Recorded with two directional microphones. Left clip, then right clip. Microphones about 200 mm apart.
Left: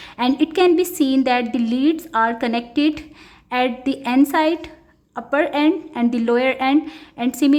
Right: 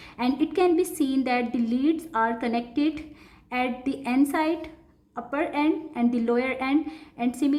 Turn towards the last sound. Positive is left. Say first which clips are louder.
# left 7 dB
turn(degrees=30)  # may be behind; listen again after turning